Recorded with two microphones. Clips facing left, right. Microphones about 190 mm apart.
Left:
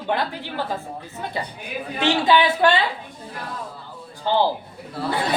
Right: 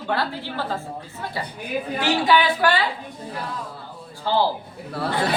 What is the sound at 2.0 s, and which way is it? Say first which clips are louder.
Speech: left 2 dB; 25° left (ahead or behind).